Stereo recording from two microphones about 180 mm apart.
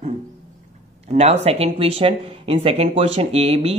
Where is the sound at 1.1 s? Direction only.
35° right (ahead or behind).